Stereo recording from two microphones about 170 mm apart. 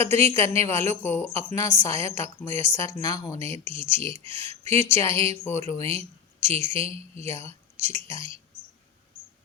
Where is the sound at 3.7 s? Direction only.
35° right (ahead or behind).